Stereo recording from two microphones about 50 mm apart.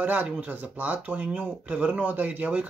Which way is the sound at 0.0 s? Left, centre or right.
Right.